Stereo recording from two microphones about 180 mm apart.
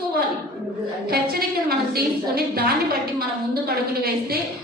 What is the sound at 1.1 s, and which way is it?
A woman's voice, 60° right (ahead or behind).